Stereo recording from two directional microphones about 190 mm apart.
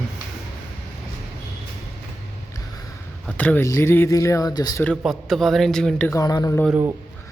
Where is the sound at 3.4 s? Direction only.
10° left (ahead or behind).